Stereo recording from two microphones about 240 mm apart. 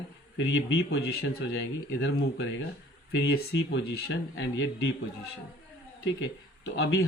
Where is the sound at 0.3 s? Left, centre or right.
Left.